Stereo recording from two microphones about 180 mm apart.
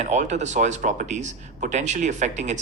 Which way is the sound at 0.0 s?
40° right (ahead or behind).